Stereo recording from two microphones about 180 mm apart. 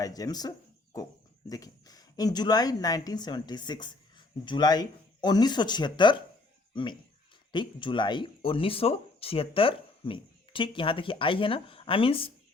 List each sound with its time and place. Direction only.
0.0 s speech: 20° left (ahead or behind)
7.5 s speech: 25° left (ahead or behind)